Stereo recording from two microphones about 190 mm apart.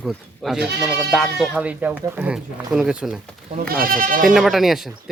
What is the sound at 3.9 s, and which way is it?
Speech, 45° right (ahead or behind).